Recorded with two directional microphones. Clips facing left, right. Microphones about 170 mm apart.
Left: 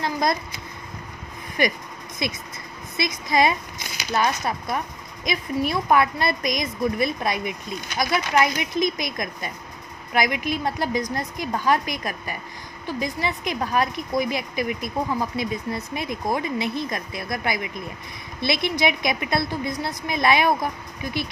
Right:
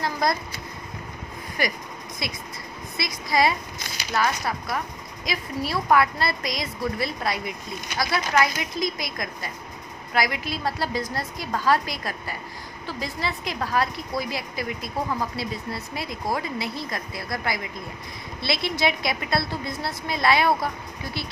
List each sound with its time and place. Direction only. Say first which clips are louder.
0.0 s speech: left 1 dB; 20° left (ahead or behind)
1.6 s a woman's voice: left 4 dB; 20° left (ahead or behind)
3.0 s a woman's voice: left 2 dB; 20° left (ahead or behind)